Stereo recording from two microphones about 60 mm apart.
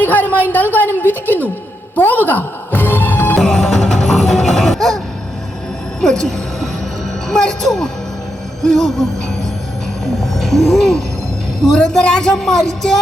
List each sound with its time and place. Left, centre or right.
0.0 s a man's voice: left
2.0 s music: left
3.3 s music: centre
6.0 s speech: centre
10.2 s music: centre
11.6 s speech: centre